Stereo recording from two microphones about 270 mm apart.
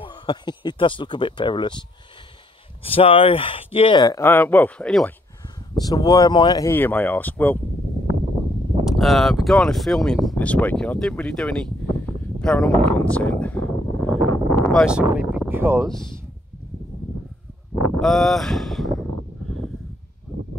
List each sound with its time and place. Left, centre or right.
0.0 s speech: centre
5.8 s speech: centre
8.8 s speech: centre
12.4 s a sound: centre
18.0 s speech: centre